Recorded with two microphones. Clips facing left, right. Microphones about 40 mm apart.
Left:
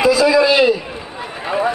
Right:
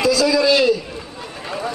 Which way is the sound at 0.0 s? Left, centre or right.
Left.